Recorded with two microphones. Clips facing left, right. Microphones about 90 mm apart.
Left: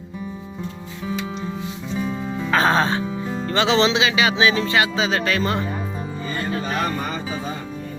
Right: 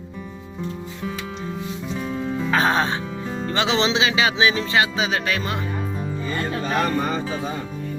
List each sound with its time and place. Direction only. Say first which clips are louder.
1.9 s music: left 1 dB; 5° left (ahead or behind)
2.5 s music: left 2 dB; 15° right (ahead or behind)